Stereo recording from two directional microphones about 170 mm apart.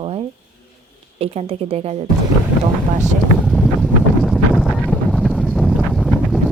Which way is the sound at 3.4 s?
Centre (ahead or behind).